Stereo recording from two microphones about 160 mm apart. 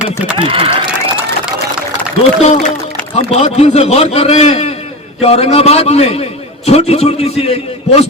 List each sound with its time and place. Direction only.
0.3 s speech: 35° right (ahead or behind)
2.4 s a man's voice: 45° left (ahead or behind)